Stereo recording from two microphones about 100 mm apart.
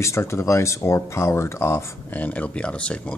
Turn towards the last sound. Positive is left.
turn(degrees=10)  # may be behind; listen again after turning